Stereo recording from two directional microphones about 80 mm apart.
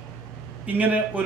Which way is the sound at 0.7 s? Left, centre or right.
Right.